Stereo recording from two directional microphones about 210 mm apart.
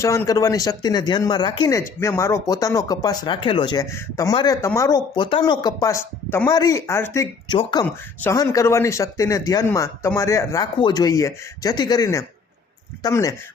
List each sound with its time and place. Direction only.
0.0 s speech: 15° left (ahead or behind)